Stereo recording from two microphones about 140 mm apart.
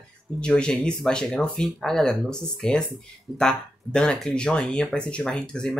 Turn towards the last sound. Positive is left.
turn(degrees=5)  # may be behind; listen again after turning